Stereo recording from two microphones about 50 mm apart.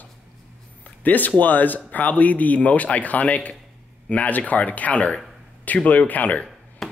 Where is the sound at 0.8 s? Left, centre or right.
Left.